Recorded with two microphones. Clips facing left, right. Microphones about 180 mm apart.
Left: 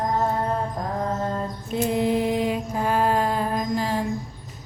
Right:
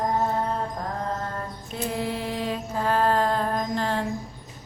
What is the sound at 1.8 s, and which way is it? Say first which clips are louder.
Mantra: left 7 dB; 20° left (ahead or behind).